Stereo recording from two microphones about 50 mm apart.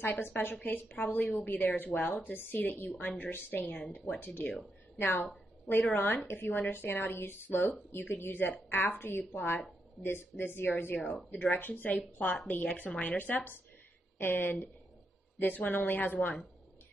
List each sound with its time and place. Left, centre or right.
0.0 s a woman's voice: left
13.2 s speech: left